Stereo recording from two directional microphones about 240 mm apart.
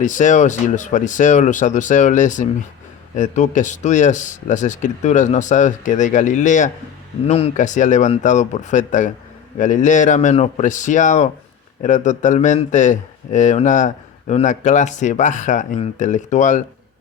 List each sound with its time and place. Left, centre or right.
0.0 s speech: left